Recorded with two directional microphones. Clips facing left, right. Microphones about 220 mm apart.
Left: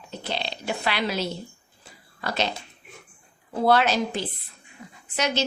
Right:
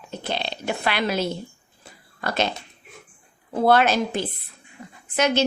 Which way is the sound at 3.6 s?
50° right (ahead or behind).